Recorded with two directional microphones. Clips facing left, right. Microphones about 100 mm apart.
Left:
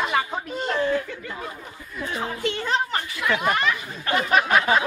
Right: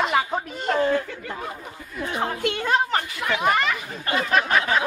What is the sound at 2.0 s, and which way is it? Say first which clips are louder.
Speech: right 2 dB; 55° right (ahead or behind).